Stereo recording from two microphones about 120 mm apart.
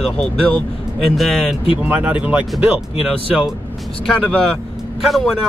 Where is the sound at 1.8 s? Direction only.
10° right (ahead or behind).